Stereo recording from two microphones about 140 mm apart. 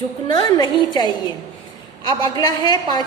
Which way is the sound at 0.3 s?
30° left (ahead or behind).